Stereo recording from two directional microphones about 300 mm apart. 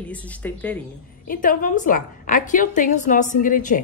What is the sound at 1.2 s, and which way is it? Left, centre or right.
A woman's voice, left.